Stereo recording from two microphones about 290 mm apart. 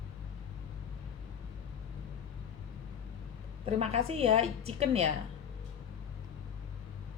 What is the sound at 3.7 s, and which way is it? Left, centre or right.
A woman's voice, right.